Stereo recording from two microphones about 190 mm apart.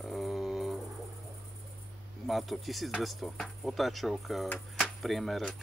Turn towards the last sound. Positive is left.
turn(degrees=0)  # may be behind; listen again after turning